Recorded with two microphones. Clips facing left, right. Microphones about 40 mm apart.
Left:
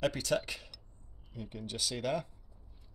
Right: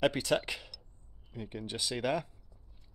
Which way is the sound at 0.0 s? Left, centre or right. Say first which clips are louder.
Right 3 dB; right.